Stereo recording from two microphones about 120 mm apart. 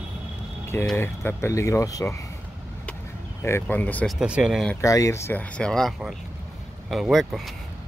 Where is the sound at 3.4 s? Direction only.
15° left (ahead or behind).